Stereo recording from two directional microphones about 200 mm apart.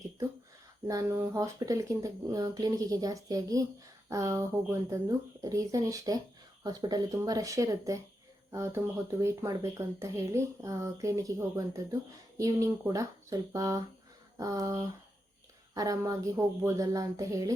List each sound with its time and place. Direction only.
0.9 s speech: 15° right (ahead or behind)